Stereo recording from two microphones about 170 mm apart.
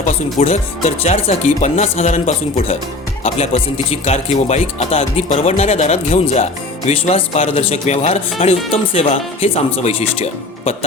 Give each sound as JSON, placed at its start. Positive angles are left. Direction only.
{"t": 0.3, "sound": "speech", "side_deg": 40}